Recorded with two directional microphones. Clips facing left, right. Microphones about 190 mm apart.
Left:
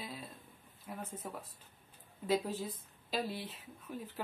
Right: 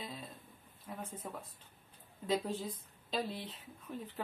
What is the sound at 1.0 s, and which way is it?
Speech, 5° right (ahead or behind).